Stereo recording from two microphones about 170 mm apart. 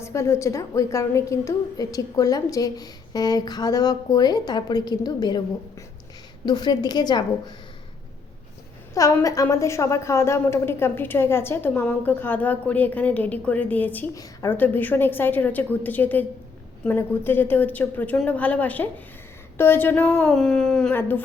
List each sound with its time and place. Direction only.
0.0 s a woman's voice: 15° left (ahead or behind)
6.4 s a woman's voice: 25° left (ahead or behind)
9.0 s a woman's voice: 20° left (ahead or behind)